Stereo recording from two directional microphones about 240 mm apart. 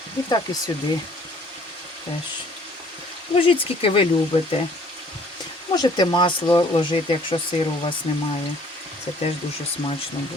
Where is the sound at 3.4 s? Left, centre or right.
Left.